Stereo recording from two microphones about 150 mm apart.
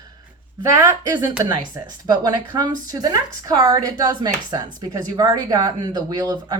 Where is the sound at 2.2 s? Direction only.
30° right (ahead or behind).